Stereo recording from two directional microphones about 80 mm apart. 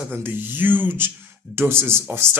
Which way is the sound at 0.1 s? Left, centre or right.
Right.